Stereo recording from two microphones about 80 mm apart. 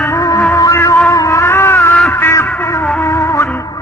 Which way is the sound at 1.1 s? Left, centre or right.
Left.